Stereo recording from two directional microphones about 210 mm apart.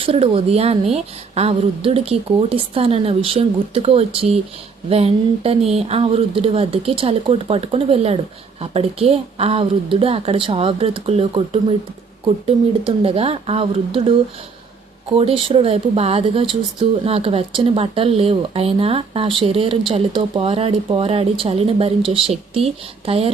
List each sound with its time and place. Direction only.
0.0 s speech: 25° right (ahead or behind)
15.2 s speech: 25° right (ahead or behind)